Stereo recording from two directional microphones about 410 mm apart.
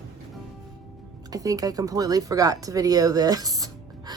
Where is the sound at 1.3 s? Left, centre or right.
Centre.